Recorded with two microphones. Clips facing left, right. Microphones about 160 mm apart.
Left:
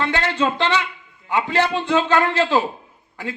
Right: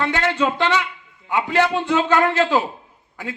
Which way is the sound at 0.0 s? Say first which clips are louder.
Right 1 dB; 15° right (ahead or behind).